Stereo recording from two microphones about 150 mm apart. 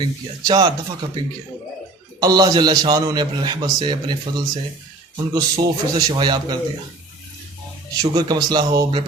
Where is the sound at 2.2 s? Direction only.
25° right (ahead or behind).